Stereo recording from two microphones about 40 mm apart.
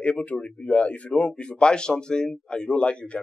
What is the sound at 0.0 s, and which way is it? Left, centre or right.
Speech, left.